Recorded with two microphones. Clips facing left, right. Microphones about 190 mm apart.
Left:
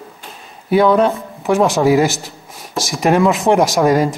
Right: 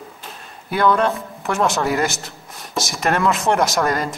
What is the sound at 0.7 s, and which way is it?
Speech, centre (ahead or behind).